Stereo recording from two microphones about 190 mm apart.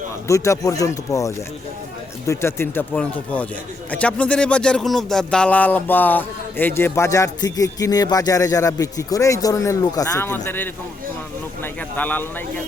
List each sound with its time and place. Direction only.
0.3 s speech: 15° left (ahead or behind)